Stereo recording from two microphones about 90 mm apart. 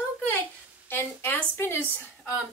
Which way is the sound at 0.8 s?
25° left (ahead or behind).